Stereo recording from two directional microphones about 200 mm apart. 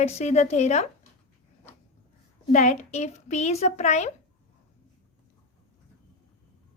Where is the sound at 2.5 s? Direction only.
35° left (ahead or behind).